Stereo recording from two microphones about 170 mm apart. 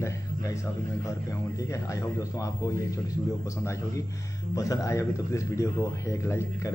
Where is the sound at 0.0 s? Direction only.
20° left (ahead or behind).